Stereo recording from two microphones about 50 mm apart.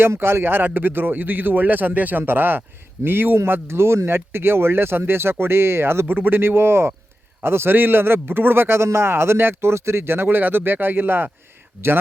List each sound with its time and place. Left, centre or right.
0.0 s speech: right
6.1 s speech: right